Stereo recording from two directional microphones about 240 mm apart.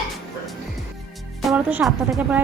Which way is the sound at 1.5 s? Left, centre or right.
Centre.